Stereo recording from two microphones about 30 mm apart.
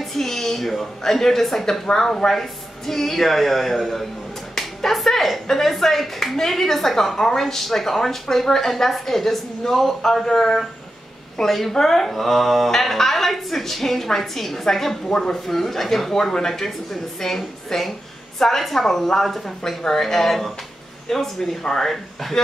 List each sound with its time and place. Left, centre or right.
0.0 s a woman's voice: centre
4.6 s clapping: centre
5.0 s a woman's voice: centre
15.3 s a woman's voice: centre